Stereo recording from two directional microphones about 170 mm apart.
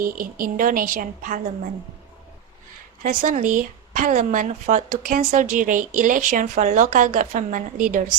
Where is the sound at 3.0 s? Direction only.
50° right (ahead or behind).